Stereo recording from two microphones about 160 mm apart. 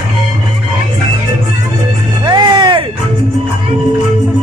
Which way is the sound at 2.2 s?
30° right (ahead or behind).